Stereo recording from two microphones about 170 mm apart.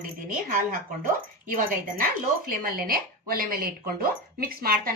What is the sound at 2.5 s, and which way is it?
Speech, 60° right (ahead or behind).